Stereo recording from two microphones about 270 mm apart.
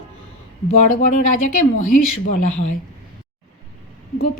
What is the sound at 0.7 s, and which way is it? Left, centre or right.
Speech, left.